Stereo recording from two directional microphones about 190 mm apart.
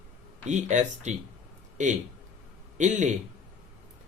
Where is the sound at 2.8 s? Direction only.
40° right (ahead or behind).